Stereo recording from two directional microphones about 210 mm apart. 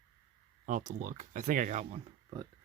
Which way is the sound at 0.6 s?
35° right (ahead or behind).